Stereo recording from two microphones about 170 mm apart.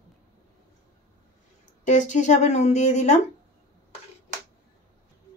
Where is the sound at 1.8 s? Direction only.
45° left (ahead or behind).